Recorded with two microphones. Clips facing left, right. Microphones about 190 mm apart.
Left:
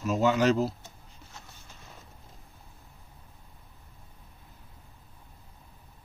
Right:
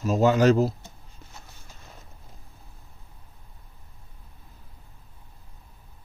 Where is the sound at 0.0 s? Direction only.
40° right (ahead or behind).